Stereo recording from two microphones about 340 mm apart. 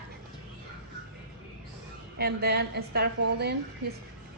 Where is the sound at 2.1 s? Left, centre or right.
Right.